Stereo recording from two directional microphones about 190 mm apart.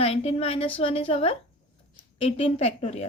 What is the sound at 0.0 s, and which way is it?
A woman's voice, 35° left (ahead or behind).